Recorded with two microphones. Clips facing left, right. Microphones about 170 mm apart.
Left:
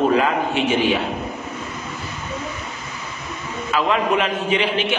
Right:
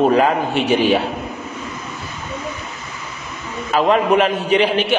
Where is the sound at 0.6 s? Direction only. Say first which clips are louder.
Right 5 dB; 35° right (ahead or behind).